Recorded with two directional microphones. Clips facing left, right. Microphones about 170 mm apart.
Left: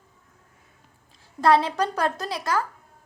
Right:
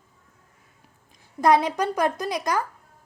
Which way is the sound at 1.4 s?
15° right (ahead or behind).